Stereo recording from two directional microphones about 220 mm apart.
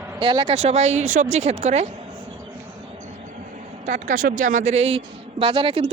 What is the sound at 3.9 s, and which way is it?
Speech, 40° right (ahead or behind).